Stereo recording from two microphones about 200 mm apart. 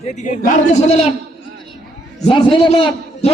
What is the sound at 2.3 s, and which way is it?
A man's voice, 25° left (ahead or behind).